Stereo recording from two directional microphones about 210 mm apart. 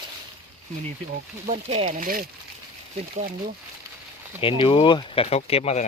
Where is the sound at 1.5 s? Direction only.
35° right (ahead or behind).